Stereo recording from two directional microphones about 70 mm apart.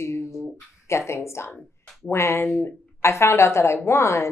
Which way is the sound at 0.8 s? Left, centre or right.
Left.